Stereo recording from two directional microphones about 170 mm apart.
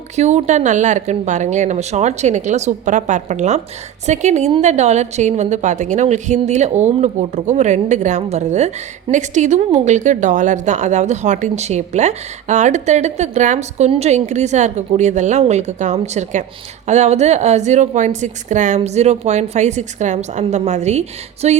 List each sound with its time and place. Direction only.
0.2 s a woman's voice: 40° right (ahead or behind)